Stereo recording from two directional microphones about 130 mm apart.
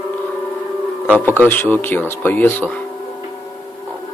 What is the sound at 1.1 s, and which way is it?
Speech, 15° left (ahead or behind).